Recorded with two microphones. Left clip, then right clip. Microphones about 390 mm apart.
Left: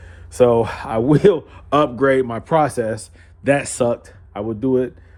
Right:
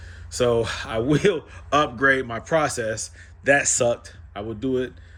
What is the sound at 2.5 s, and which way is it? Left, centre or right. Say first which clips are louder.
Speech: left 3 dB; centre.